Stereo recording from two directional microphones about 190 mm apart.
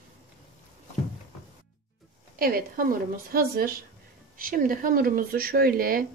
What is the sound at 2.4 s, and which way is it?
Speech, 50° right (ahead or behind).